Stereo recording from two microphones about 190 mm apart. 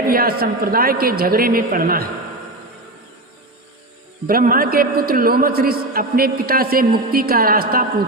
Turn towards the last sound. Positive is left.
turn(degrees=-50)  # may be behind; listen again after turning